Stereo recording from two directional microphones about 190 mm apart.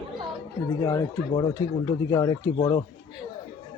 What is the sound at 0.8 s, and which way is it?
Speech, 20° left (ahead or behind).